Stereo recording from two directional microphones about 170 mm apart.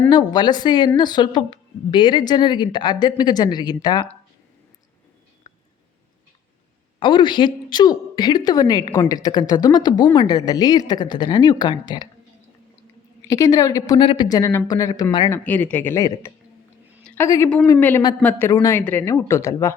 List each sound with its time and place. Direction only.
0.1 s a woman's voice: 25° left (ahead or behind)
7.0 s a woman's voice: 25° left (ahead or behind)
13.2 s a woman's voice: 20° left (ahead or behind)
15.3 s speech: 10° left (ahead or behind)
17.0 s a sound: 5° left (ahead or behind)
17.2 s a woman's voice: 20° left (ahead or behind)